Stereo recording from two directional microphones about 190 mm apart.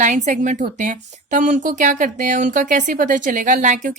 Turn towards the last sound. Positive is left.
turn(degrees=-40)  # may be behind; listen again after turning